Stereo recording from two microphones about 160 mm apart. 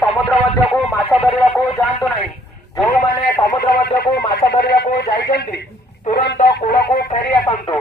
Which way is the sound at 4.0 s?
90° left.